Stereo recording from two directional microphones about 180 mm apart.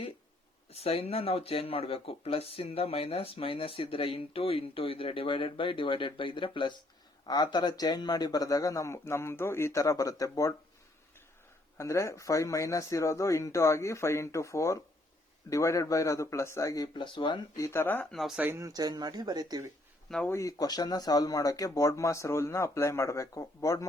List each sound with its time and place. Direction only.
0.7 s speech: 35° left (ahead or behind); by 10.5 s 20° left (ahead or behind)
11.8 s speech: 15° left (ahead or behind)
17.7 s speech: 10° left (ahead or behind); by 19.6 s 20° right (ahead or behind)
20.1 s speech: 5° left (ahead or behind)
20.3 s speech: 20° left (ahead or behind)